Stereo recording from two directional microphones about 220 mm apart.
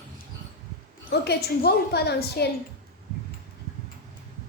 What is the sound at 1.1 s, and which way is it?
A woman's voice, 50° left (ahead or behind).